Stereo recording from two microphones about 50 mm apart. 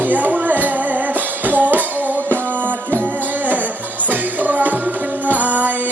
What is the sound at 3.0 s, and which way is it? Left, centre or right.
Music, right.